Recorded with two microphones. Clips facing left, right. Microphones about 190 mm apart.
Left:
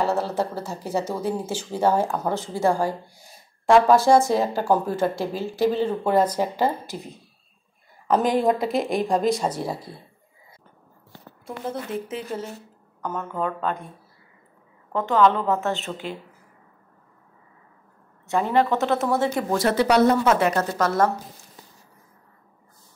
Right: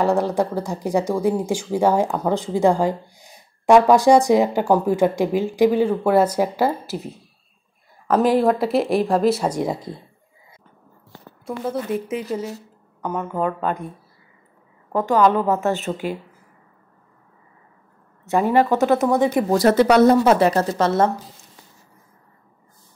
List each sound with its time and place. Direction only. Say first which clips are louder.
0.0 s speech: right 5 dB; 15° right (ahead or behind)
8.1 s speech: right 3 dB; 5° right (ahead or behind)
9.6 s speech: right 6 dB; 20° right (ahead or behind)
12.1 s speech: right 5 dB; 10° right (ahead or behind)
15.2 s speech: right 1 dB; 10° right (ahead or behind)
18.2 s a woman's voice: right 4 dB; 10° right (ahead or behind)
19.0 s speech: right 5 dB; 15° right (ahead or behind)
19.5 s speech: right 5 dB; 40° right (ahead or behind)
20.1 s a woman's voice: right 5 dB; 35° right (ahead or behind)